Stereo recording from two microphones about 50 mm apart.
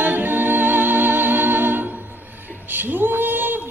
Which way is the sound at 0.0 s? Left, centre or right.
Right.